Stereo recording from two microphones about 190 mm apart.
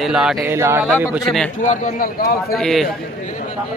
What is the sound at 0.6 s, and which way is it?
Speech, 15° right (ahead or behind).